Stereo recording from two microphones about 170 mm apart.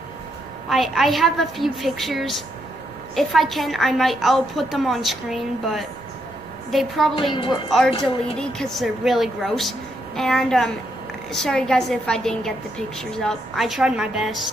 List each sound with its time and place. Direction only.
0.7 s a woman's voice: centre (ahead or behind)
7.2 s a woman's voice: 30° left (ahead or behind)
8.0 s a woman's voice: 5° left (ahead or behind)